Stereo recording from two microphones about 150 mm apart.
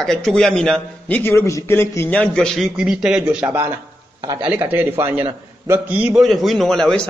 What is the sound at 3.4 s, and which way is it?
Speech, 15° right (ahead or behind).